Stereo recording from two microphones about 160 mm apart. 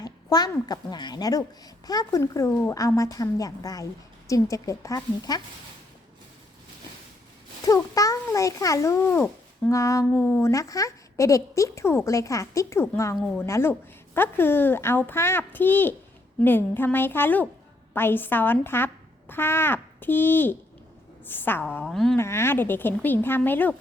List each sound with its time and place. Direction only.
0.0 s speech: 25° left (ahead or behind)
7.7 s a child's voice: 20° left (ahead or behind)
13.1 s speech: 5° left (ahead or behind)
13.4 s a woman's voice: 15° left (ahead or behind)
22.2 s a woman's voice: 15° left (ahead or behind)